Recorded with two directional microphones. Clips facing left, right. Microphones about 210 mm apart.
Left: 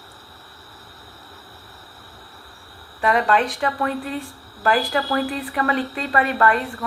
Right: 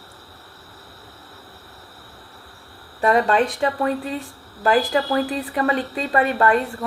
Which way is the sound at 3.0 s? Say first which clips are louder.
Right 2 dB; 35° right (ahead or behind).